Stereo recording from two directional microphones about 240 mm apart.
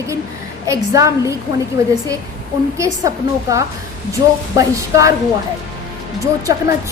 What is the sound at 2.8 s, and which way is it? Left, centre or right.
A woman's voice, centre.